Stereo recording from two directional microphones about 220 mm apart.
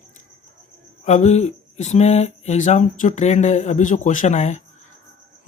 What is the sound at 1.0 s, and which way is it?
Speech, 30° left (ahead or behind).